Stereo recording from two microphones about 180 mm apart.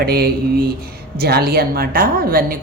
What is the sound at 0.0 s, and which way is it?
A woman's voice, 60° right (ahead or behind).